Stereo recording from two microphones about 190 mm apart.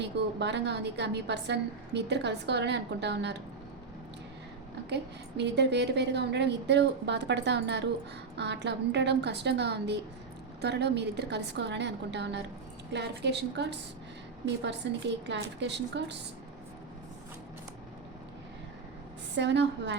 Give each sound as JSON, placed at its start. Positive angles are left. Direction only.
{"t": 0.0, "sound": "a woman's voice", "side_deg": -65}
{"t": 5.4, "sound": "a woman's voice", "side_deg": -65}
{"t": 19.4, "sound": "a woman's voice", "side_deg": -65}